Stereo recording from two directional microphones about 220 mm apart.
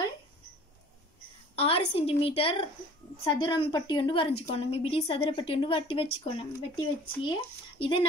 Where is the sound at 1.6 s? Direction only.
25° left (ahead or behind).